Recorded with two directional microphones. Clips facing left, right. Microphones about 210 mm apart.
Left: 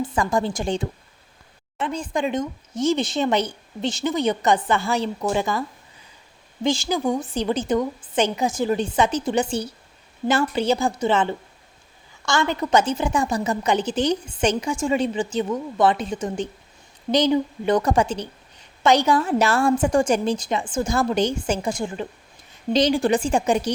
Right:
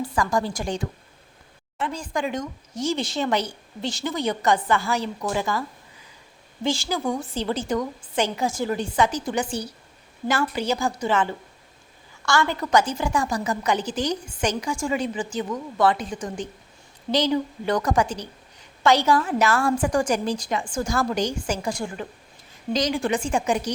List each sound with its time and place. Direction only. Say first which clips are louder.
0.0 s a woman's voice: left 2 dB; 25° left (ahead or behind)